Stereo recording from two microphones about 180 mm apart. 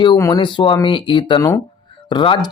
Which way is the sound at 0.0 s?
25° left (ahead or behind).